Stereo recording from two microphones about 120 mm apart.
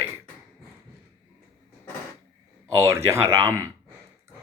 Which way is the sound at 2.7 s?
25° right (ahead or behind).